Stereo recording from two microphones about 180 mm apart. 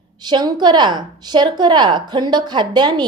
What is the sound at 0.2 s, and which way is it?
A woman's voice, 25° right (ahead or behind).